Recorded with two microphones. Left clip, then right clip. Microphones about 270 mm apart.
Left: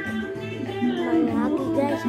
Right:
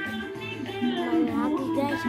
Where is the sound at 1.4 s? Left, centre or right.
Centre.